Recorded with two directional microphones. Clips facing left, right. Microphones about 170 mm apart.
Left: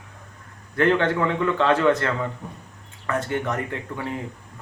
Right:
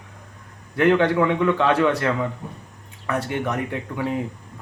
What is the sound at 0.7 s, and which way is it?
Speech, 15° right (ahead or behind).